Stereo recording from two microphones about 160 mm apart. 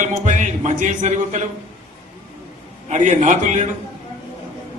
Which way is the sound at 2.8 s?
50° right (ahead or behind).